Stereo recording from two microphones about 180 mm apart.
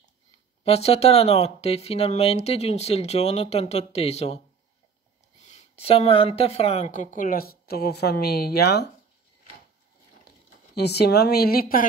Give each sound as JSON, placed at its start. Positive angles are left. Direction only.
{"t": 0.7, "sound": "speech", "side_deg": 35}
{"t": 5.4, "sound": "a woman's voice", "side_deg": 40}
{"t": 10.8, "sound": "speech", "side_deg": 65}